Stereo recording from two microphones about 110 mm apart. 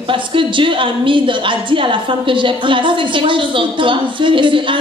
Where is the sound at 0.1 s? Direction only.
50° right (ahead or behind).